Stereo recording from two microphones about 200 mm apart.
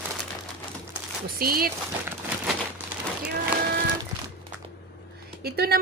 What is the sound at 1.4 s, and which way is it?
Speech, 50° right (ahead or behind).